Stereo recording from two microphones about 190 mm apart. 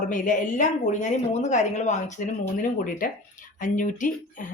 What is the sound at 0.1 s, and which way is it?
Speech, 45° left (ahead or behind).